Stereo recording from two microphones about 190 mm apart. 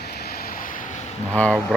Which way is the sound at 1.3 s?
5° left (ahead or behind).